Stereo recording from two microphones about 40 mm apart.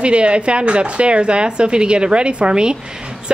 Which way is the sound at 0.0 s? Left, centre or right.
Right.